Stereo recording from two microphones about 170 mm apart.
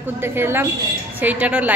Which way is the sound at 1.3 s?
10° right (ahead or behind).